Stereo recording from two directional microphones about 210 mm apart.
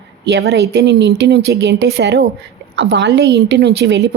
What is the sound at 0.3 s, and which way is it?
A woman's voice, 55° right (ahead or behind).